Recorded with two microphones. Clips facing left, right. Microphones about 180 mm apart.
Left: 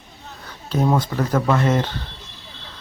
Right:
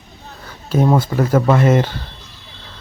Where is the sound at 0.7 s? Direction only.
10° right (ahead or behind).